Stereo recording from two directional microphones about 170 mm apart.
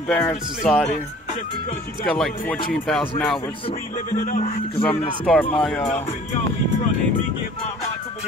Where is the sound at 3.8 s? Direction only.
50° left (ahead or behind).